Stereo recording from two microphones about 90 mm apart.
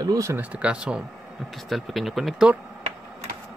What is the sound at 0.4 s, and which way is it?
Speech, 15° right (ahead or behind).